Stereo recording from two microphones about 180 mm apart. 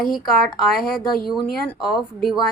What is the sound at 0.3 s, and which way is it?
A woman's voice, centre (ahead or behind).